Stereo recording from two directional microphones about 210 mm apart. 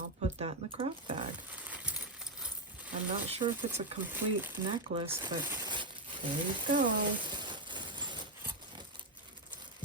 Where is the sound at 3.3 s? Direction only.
30° right (ahead or behind).